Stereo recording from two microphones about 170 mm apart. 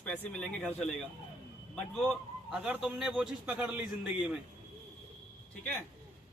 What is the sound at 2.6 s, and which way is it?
A man's voice, 5° right (ahead or behind).